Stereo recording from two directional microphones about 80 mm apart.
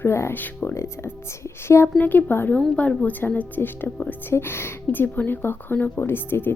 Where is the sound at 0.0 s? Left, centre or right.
Left.